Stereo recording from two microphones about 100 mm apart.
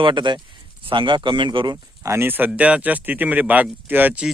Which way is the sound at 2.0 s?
25° right (ahead or behind).